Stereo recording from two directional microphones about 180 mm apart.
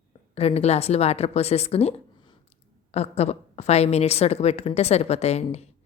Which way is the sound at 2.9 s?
35° left (ahead or behind).